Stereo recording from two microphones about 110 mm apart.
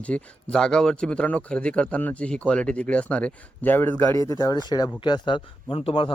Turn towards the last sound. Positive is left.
turn(degrees=55)  # may be behind; listen again after turning